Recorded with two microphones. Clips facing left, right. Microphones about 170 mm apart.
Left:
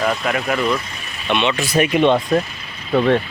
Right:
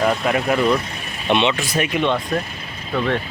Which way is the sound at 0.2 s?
25° right (ahead or behind).